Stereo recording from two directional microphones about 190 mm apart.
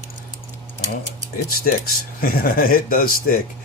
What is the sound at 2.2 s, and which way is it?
Speech, 50° left (ahead or behind).